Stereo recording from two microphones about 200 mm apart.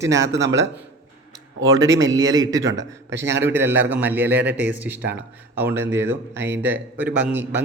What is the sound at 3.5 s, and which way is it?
A man's voice, 10° right (ahead or behind).